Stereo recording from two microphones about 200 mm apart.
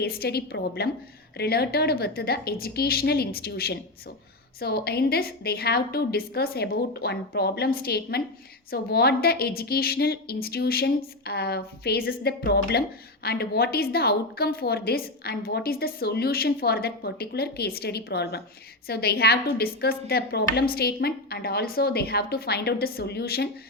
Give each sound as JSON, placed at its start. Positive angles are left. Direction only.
{"t": 0.0, "sound": "a woman's voice", "side_deg": 50}